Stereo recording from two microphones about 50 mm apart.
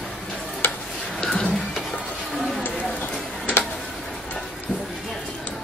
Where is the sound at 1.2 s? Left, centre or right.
Left.